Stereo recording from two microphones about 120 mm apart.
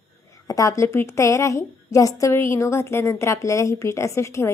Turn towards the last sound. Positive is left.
turn(degrees=25)  # may be behind; listen again after turning